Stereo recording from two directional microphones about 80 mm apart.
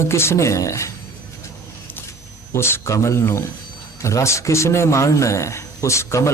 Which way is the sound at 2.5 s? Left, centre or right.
Left.